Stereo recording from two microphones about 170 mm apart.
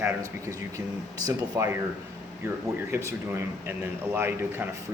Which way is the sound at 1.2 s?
15° right (ahead or behind).